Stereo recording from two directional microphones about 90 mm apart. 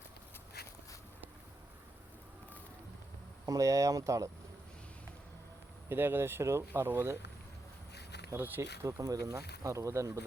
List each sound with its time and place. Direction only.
3.4 s speech: 40° right (ahead or behind)
5.9 s speech: 25° right (ahead or behind)
8.3 s speech: 20° right (ahead or behind)